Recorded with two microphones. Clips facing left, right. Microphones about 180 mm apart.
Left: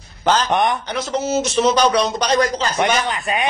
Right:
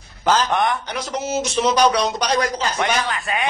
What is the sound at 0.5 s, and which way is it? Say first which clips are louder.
Speech: left 2 dB; 20° left (ahead or behind).